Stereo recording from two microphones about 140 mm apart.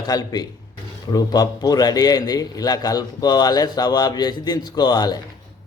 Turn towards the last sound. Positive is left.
turn(degrees=30)  # may be behind; listen again after turning